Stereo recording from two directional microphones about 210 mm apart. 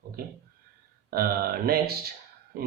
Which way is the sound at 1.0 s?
45° right (ahead or behind).